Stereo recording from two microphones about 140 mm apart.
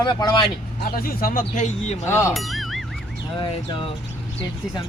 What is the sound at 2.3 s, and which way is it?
Music, centre (ahead or behind).